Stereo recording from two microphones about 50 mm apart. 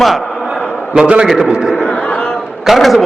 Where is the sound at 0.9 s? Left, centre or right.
Right.